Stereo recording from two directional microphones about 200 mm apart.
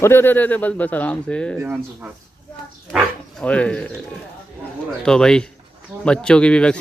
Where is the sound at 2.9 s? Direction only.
5° left (ahead or behind).